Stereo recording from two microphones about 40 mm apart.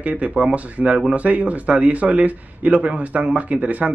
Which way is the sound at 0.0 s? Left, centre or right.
Right.